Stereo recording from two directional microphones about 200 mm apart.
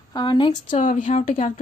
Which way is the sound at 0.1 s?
20° left (ahead or behind).